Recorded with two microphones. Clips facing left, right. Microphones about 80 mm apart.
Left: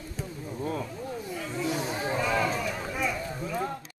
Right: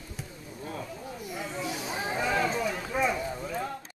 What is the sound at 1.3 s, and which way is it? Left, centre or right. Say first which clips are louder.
Snake: right 1 dB; centre.